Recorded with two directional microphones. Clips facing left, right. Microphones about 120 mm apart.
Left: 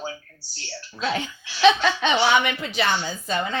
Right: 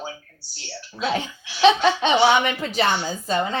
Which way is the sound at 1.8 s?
35° right (ahead or behind).